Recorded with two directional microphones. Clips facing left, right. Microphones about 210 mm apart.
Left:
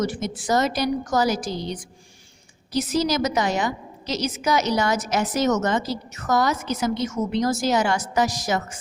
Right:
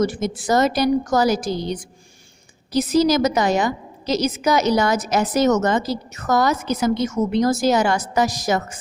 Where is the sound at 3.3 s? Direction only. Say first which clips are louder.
Right 4 dB; 40° right (ahead or behind).